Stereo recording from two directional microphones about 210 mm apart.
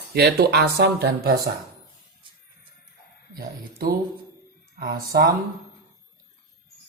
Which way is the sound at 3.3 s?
45° right (ahead or behind).